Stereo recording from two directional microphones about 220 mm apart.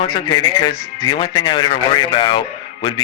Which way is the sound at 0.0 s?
20° left (ahead or behind).